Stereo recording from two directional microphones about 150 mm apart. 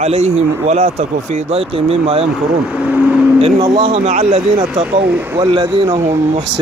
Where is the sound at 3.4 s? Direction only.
40° right (ahead or behind).